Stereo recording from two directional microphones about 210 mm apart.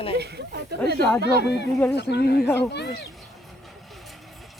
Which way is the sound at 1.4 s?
55° left (ahead or behind).